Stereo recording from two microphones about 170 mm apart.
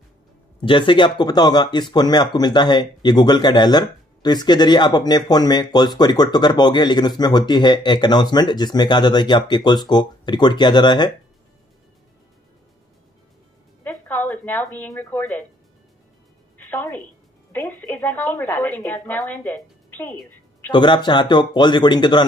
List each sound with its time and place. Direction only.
0.7 s speech: 30° left (ahead or behind)
13.8 s speech: 10° left (ahead or behind)
16.5 s music: 10° left (ahead or behind)
17.5 s a woman's voice: 10° left (ahead or behind)
20.7 s speech: 25° left (ahead or behind)